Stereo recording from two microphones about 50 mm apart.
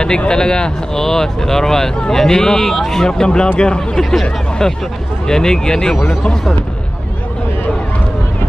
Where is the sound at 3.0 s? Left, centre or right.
Centre.